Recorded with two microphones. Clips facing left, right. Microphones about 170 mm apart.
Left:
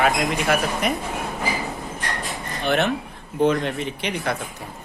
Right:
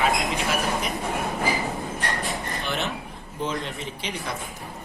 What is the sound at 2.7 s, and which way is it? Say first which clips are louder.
Speech: left 11 dB; 60° left (ahead or behind).